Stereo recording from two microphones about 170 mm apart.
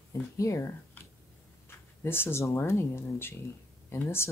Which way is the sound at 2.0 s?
15° left (ahead or behind).